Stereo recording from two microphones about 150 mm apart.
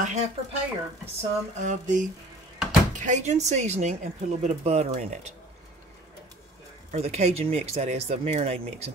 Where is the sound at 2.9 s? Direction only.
55° right (ahead or behind).